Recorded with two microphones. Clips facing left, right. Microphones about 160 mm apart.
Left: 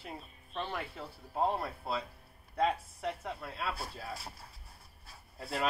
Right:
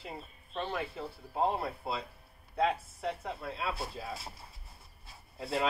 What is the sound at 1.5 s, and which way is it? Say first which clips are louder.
Speech: right 1 dB; 10° right (ahead or behind).